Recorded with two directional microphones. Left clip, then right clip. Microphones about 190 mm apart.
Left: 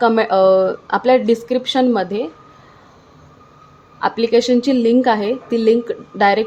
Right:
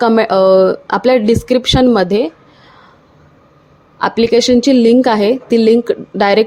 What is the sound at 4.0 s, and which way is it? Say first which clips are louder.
A woman's voice: right 4 dB; 30° right (ahead or behind).